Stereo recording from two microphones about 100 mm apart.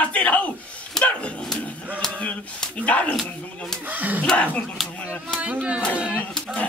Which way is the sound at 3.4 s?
10° left (ahead or behind).